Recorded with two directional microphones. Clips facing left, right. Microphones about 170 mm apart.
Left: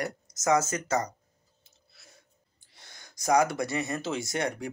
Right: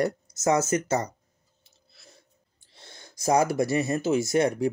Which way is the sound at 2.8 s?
25° right (ahead or behind).